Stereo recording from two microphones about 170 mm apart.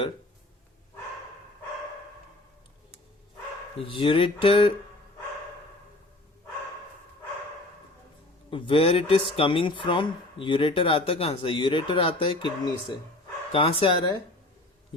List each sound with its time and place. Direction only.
3.8 s speech: 30° left (ahead or behind)
8.4 s speech: 30° left (ahead or behind)